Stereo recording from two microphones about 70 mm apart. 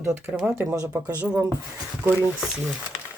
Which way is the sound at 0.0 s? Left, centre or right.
Right.